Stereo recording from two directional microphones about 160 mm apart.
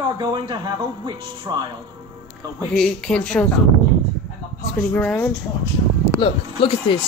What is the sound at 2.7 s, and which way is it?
Speech, 5° left (ahead or behind).